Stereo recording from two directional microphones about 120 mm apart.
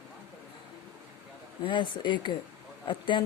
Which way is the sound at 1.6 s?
40° left (ahead or behind).